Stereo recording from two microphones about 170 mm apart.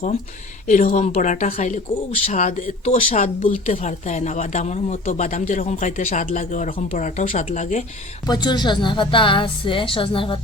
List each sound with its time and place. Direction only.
0.7 s speech: 45° left (ahead or behind)
8.3 s a woman's voice: 25° left (ahead or behind)